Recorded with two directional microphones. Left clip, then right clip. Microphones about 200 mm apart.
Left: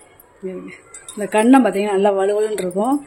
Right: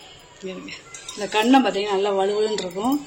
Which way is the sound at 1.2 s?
45° left (ahead or behind).